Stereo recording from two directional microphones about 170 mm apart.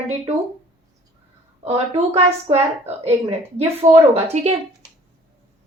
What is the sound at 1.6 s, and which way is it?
A woman's voice, 40° right (ahead or behind).